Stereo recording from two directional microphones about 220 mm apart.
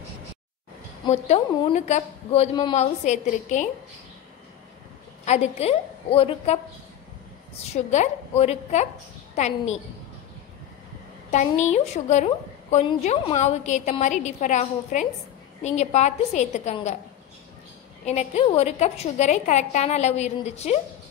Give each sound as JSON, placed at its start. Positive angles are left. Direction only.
{"t": 1.0, "sound": "a woman's voice", "side_deg": 30}
{"t": 5.2, "sound": "a woman's voice", "side_deg": 30}
{"t": 7.7, "sound": "a woman's voice", "side_deg": 30}
{"t": 11.2, "sound": "a woman's voice", "side_deg": 30}
{"t": 18.0, "sound": "a woman's voice", "side_deg": 30}